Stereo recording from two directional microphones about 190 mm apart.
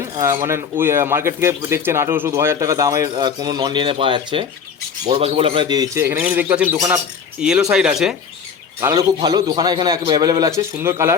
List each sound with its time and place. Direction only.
0.2 s speech: 15° right (ahead or behind)
8.8 s a man's voice: 15° right (ahead or behind)